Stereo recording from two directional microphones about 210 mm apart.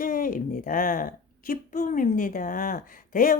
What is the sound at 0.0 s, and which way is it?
A woman's voice, 40° left (ahead or behind).